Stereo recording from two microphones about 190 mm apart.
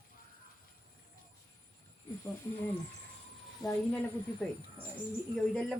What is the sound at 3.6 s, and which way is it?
Speech, 20° left (ahead or behind).